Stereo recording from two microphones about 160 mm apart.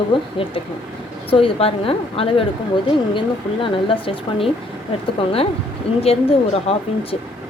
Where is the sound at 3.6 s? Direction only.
35° left (ahead or behind).